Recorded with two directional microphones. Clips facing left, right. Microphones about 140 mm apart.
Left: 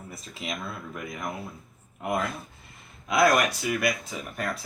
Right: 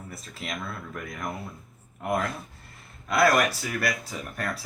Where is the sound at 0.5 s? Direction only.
5° left (ahead or behind).